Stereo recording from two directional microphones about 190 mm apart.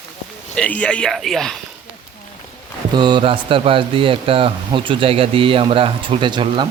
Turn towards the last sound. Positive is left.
turn(degrees=-25)  # may be behind; listen again after turning